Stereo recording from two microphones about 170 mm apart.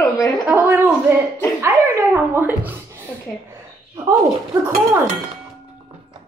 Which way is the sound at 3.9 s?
20° right (ahead or behind).